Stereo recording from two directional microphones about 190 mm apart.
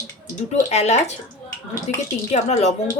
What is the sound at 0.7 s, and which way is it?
Speech, 35° left (ahead or behind).